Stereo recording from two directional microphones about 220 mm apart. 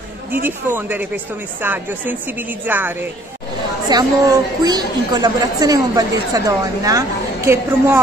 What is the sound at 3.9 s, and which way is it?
A woman's voice, 20° right (ahead or behind).